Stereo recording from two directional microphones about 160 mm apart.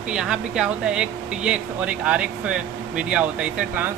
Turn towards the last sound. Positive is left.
turn(degrees=-10)  # may be behind; listen again after turning